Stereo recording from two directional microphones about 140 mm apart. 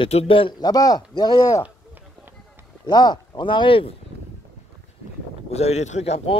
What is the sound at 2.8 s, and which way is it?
Speech, 30° left (ahead or behind).